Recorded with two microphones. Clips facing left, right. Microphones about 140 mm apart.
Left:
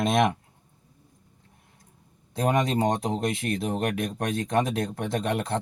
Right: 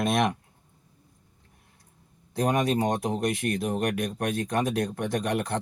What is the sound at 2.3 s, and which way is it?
Speech, 20° left (ahead or behind).